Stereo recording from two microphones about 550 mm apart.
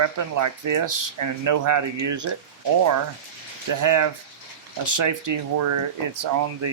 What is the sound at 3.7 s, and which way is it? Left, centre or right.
Speech, right.